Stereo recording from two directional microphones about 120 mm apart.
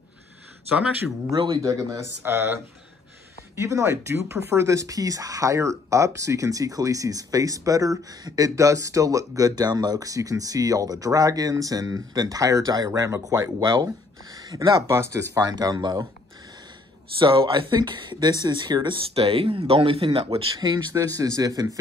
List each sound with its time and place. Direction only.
0.7 s speech: 10° right (ahead or behind)
1.3 s speech: 40° right (ahead or behind)
1.6 s speech: 25° right (ahead or behind)
17.2 s speech: 45° right (ahead or behind)
19.1 s speech: 50° right (ahead or behind)
20.6 s speech: 30° right (ahead or behind)